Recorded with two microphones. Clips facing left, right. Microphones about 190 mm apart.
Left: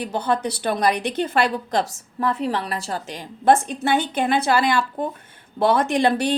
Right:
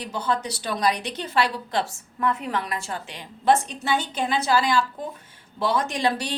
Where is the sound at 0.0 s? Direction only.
55° left (ahead or behind).